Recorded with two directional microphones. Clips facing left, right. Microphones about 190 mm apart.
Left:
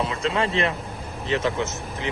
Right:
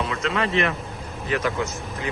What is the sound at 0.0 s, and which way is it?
Speech, 30° left (ahead or behind).